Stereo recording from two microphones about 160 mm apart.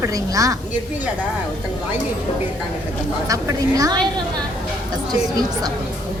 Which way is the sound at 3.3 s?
20° right (ahead or behind).